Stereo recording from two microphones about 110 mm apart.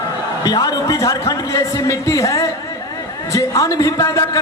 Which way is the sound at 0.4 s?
35° left (ahead or behind).